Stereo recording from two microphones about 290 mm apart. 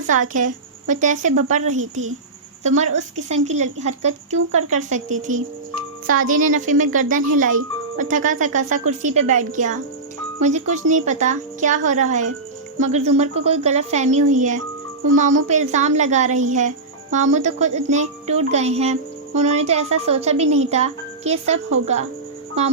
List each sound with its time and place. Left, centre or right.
0.1 s speech: right
3.2 s speech: right